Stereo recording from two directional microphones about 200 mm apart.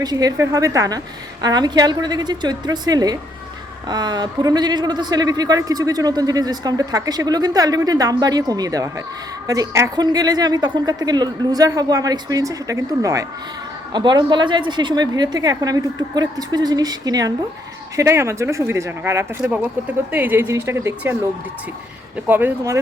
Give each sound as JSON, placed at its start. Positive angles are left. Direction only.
{"t": 0.0, "sound": "a man's voice", "side_deg": -20}
{"t": 22.3, "sound": "speech", "side_deg": -10}